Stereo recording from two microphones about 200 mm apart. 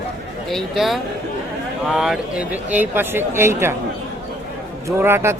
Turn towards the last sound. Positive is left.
turn(degrees=-10)  # may be behind; listen again after turning